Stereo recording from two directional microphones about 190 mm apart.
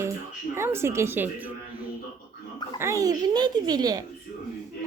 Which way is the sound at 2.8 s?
15° right (ahead or behind).